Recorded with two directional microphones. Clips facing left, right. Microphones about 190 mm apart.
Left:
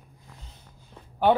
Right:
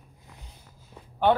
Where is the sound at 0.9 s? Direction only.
10° right (ahead or behind).